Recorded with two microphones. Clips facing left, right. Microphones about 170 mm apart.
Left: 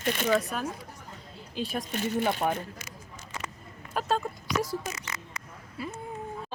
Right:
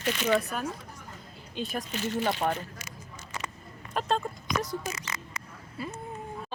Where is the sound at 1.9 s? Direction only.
55° left (ahead or behind).